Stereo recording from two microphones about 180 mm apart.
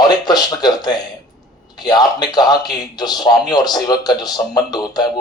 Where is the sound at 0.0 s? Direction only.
25° left (ahead or behind).